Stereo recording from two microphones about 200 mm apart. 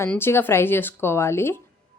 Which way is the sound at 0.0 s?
10° left (ahead or behind).